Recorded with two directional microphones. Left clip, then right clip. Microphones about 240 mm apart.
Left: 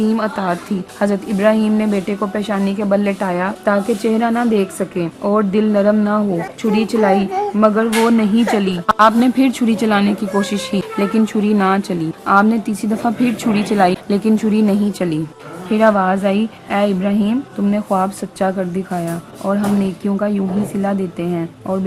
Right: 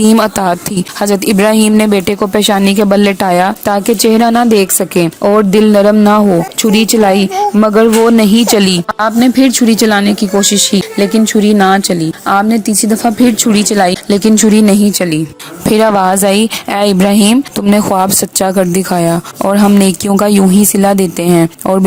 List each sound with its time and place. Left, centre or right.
0.0 s a woman's voice: right
8.9 s speech: centre
15.7 s speech: right